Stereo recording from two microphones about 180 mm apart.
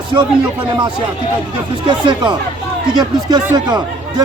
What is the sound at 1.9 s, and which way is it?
Speech, 25° right (ahead or behind).